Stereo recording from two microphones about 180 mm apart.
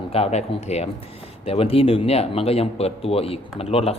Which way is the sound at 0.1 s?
35° left (ahead or behind).